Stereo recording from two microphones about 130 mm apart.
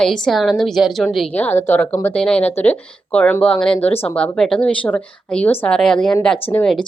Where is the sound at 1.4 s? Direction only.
15° left (ahead or behind).